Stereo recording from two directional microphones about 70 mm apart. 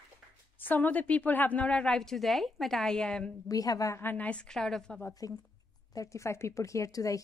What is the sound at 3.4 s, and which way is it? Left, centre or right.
Speech, left.